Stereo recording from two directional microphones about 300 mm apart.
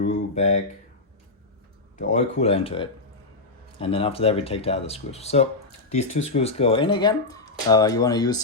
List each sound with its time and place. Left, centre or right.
0.1 s speech: left
2.0 s speech: left